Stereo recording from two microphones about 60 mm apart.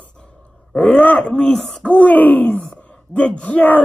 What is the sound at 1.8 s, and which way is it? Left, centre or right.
Speech, left.